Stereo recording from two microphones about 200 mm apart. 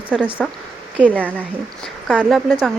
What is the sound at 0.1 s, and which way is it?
Speech, 5° right (ahead or behind).